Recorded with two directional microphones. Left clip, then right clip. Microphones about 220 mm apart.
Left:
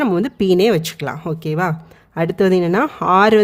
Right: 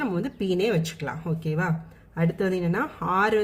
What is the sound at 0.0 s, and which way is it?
Speech, 50° left (ahead or behind).